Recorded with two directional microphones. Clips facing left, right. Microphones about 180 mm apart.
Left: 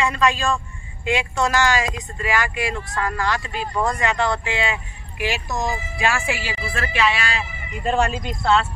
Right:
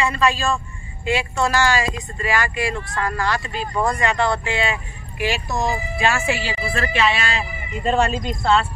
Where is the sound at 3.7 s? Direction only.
Centre (ahead or behind).